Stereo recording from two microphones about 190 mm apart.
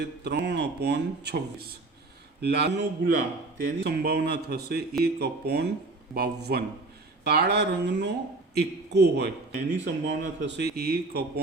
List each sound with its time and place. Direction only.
0.0 s speech: 65° right (ahead or behind)